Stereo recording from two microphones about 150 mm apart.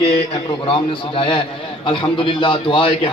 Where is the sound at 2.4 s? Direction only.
35° left (ahead or behind).